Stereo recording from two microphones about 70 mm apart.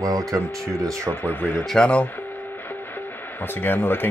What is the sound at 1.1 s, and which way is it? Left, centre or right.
Speech, left.